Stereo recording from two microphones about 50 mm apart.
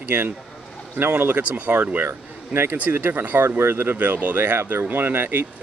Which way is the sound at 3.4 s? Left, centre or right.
Right.